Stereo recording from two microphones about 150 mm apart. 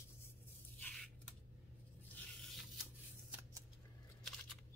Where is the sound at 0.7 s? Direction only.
5° left (ahead or behind).